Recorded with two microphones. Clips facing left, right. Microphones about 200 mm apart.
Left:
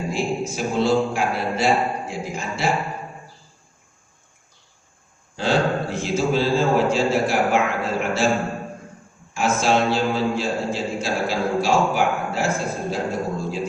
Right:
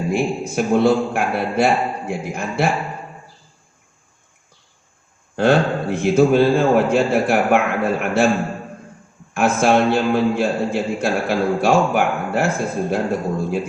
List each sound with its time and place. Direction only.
0.1 s a man's voice: 55° right (ahead or behind)
5.4 s a man's voice: 60° right (ahead or behind)
9.3 s a man's voice: 55° right (ahead or behind)